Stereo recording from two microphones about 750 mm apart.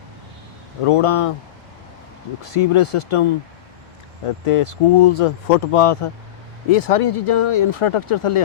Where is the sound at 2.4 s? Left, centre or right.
Left.